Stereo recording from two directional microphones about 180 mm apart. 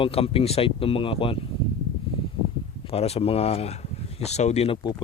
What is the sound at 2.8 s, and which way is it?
Speech, 35° left (ahead or behind).